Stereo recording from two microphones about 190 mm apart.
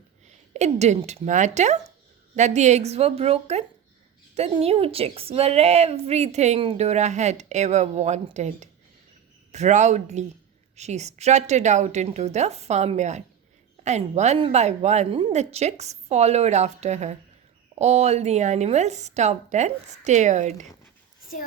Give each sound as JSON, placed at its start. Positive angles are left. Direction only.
{"t": 0.5, "sound": "a woman's voice", "side_deg": -35}